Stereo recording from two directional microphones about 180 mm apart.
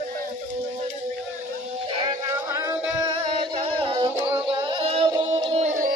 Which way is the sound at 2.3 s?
15° right (ahead or behind).